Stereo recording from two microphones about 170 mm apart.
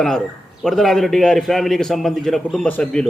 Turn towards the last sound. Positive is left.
turn(degrees=5)  # may be behind; listen again after turning